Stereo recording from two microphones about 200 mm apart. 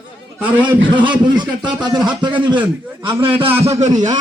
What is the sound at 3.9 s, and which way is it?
Speech, 20° right (ahead or behind).